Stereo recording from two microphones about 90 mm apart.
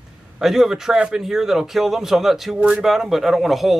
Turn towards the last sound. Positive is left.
turn(degrees=0)  # may be behind; listen again after turning